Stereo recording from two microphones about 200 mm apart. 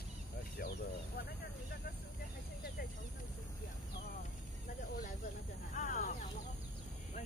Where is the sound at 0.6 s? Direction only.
45° left (ahead or behind).